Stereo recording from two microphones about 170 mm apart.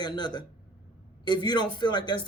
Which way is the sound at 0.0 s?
25° left (ahead or behind).